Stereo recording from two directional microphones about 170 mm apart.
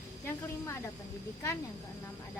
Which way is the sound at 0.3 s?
15° left (ahead or behind).